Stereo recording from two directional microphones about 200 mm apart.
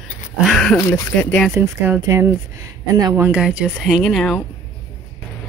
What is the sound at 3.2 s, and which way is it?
Speech, 5° right (ahead or behind).